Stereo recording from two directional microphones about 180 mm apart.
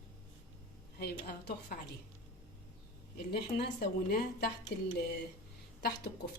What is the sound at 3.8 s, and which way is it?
Speech, 60° left (ahead or behind).